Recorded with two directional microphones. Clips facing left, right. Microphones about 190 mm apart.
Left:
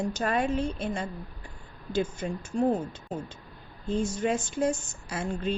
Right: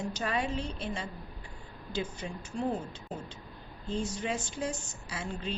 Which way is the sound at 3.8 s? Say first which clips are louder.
Left 6 dB; 50° left (ahead or behind).